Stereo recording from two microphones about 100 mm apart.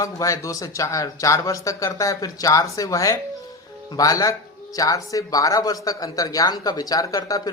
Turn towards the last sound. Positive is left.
turn(degrees=40)  # may be behind; listen again after turning